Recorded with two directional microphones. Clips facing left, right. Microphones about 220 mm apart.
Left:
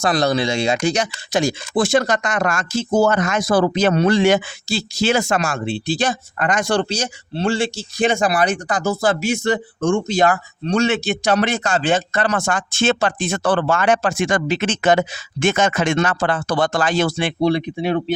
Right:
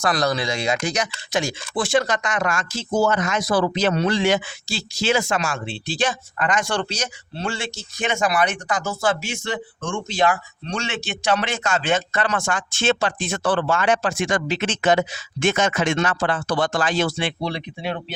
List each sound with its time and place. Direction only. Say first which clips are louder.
0.0 s speech: left 4 dB; 25° left (ahead or behind); by 17.9 s 50° left (ahead or behind)